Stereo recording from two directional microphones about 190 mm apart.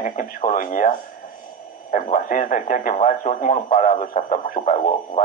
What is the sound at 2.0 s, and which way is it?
Speech, 40° left (ahead or behind).